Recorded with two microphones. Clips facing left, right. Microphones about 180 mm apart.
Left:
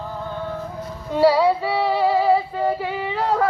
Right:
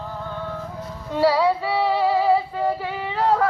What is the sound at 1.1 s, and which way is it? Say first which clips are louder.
Female singing: left 3 dB; 15° left (ahead or behind).